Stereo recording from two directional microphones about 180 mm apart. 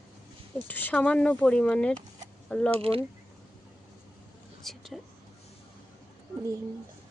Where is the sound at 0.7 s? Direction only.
10° left (ahead or behind).